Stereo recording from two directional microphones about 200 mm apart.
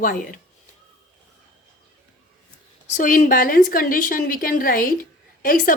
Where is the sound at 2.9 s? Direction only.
40° left (ahead or behind).